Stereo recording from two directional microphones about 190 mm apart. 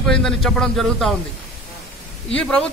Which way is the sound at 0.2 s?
5° left (ahead or behind).